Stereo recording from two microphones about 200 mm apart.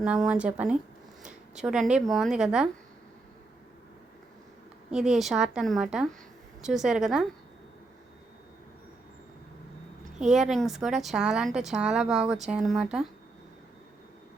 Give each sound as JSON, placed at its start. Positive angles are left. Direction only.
{"t": 0.0, "sound": "a woman's voice", "side_deg": -5}
{"t": 4.9, "sound": "a woman's voice", "side_deg": 0}
{"t": 10.2, "sound": "a woman's voice", "side_deg": 0}